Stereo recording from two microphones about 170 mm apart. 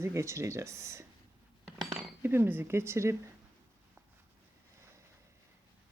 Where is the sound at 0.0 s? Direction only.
15° right (ahead or behind).